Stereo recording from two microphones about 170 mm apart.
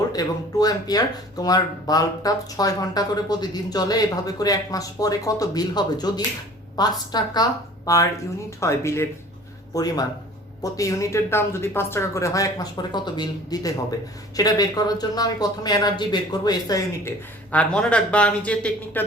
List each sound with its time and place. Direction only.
0.1 s speech: 20° left (ahead or behind)